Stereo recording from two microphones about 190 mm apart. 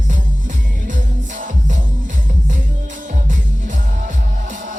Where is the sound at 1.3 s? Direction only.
45° right (ahead or behind).